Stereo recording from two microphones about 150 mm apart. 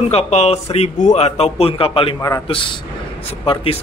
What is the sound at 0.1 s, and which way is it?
Speech, 45° left (ahead or behind).